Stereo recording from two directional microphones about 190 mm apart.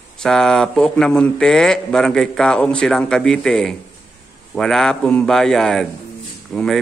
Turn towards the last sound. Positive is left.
turn(degrees=0)  # may be behind; listen again after turning